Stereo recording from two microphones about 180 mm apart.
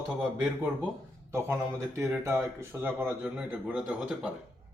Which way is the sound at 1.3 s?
15° right (ahead or behind).